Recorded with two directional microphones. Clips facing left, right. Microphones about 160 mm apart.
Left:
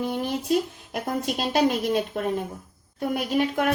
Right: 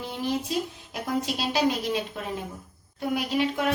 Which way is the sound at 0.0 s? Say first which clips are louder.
Left 2 dB; 50° left (ahead or behind).